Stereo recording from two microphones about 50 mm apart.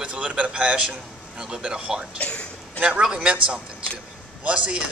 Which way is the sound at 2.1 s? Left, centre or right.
Left.